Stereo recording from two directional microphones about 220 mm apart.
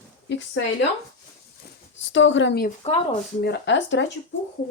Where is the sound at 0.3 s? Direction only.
55° left (ahead or behind).